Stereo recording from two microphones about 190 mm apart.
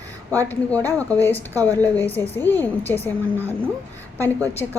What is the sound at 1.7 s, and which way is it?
A woman's voice, 10° left (ahead or behind).